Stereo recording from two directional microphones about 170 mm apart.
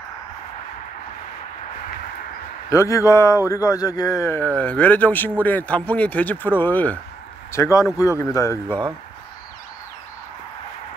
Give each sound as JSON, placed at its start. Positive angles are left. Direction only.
{"t": 2.7, "sound": "a man's voice", "side_deg": 20}